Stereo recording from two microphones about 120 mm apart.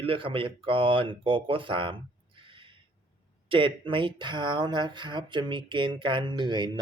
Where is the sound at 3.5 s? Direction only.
45° right (ahead or behind).